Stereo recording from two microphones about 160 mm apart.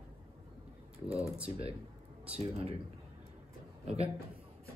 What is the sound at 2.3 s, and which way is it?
Speech, 40° right (ahead or behind).